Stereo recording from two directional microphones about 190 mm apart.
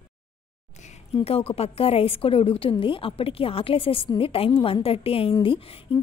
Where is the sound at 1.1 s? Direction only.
30° left (ahead or behind).